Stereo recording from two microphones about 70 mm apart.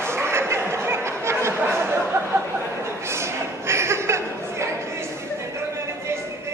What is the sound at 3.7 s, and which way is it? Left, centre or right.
Chuckle, right.